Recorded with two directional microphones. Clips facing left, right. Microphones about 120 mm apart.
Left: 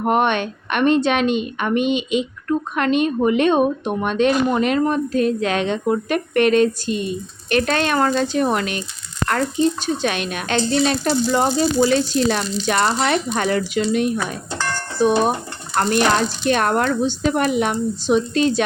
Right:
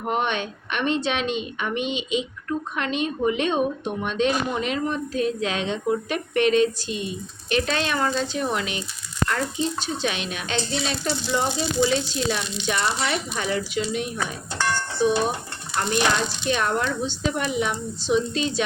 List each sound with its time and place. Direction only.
0.0 s a woman's voice: 60° left (ahead or behind)
12.4 s speech: 35° left (ahead or behind)
12.6 s speech: 55° left (ahead or behind)